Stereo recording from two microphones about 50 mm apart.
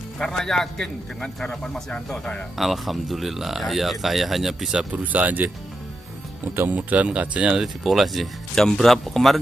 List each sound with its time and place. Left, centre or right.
0.2 s a man's voice: centre
2.5 s speech: centre
5.0 s speech: right
6.7 s speech: right
7.5 s speech: centre